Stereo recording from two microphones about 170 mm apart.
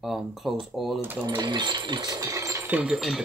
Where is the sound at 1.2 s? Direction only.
25° right (ahead or behind).